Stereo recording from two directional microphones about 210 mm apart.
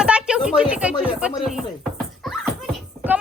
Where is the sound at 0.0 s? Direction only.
5° right (ahead or behind).